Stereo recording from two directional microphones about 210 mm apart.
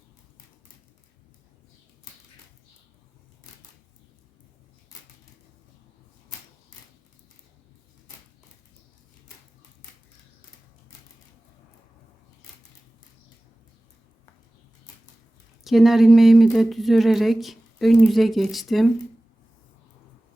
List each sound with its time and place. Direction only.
15.6 s speech: centre (ahead or behind)